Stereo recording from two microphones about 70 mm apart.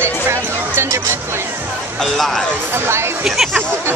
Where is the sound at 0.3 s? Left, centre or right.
Right.